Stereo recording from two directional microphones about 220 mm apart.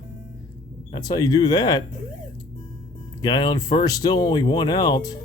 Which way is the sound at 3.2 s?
20° left (ahead or behind).